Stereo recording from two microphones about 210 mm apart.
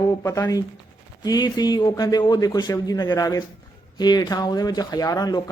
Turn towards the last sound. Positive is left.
turn(degrees=20)  # may be behind; listen again after turning